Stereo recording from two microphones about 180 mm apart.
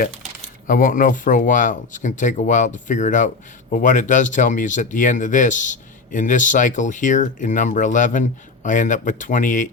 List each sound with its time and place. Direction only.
0.7 s speech: 50° left (ahead or behind)